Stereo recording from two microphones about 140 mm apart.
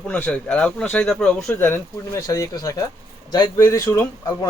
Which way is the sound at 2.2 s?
25° left (ahead or behind).